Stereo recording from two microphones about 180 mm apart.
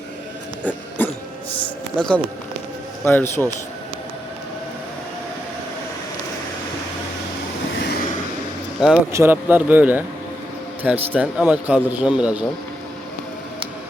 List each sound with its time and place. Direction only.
1.0 s music: 10° left (ahead or behind)
2.0 s a man's voice: 5° left (ahead or behind)
7.8 s vehicle: 65° left (ahead or behind)
9.1 s a man's voice: 10° right (ahead or behind)